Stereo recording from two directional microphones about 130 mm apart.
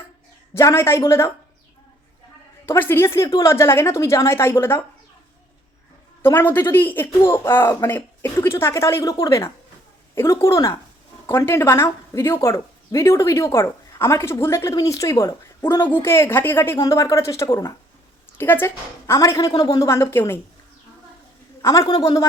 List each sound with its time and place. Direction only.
0.5 s speech: 20° left (ahead or behind)
2.6 s speech: 15° left (ahead or behind)
6.2 s speech: 15° left (ahead or behind)
21.6 s speech: 25° left (ahead or behind)